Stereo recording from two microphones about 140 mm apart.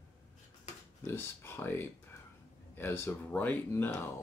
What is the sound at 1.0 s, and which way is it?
Speech, 15° left (ahead or behind).